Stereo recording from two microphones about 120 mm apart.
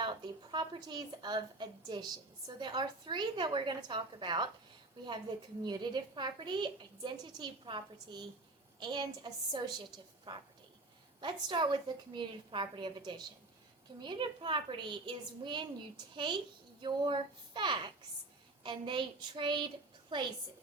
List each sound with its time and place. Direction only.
0.0 s a woman's voice: 40° right (ahead or behind)
5.6 s a woman's voice: 40° right (ahead or behind)